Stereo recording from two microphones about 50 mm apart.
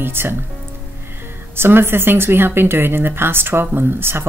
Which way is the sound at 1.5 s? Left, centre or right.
Right.